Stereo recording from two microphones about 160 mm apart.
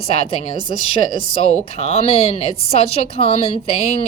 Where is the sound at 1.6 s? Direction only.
40° left (ahead or behind).